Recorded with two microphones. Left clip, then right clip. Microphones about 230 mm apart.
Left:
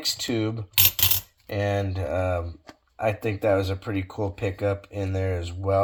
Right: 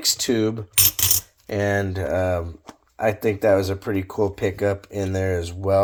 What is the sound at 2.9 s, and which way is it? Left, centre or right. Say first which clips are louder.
Speech: right 5 dB; right.